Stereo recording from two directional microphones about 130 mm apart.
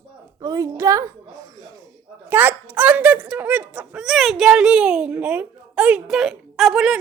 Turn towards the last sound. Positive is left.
turn(degrees=0)  # may be behind; listen again after turning